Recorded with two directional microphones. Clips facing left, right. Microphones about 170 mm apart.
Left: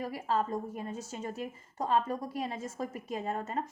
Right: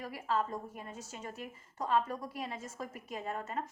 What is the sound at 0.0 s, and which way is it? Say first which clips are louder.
A woman's voice: left 3 dB; 35° left (ahead or behind).